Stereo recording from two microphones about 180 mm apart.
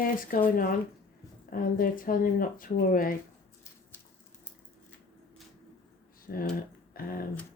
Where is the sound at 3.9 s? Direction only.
10° left (ahead or behind).